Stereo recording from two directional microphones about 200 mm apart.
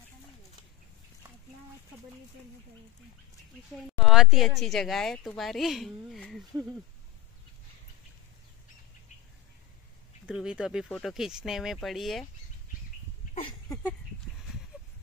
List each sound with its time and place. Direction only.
3.7 s a woman's voice: centre (ahead or behind)
10.2 s a woman's voice: 5° right (ahead or behind)
13.3 s a sound: 30° left (ahead or behind)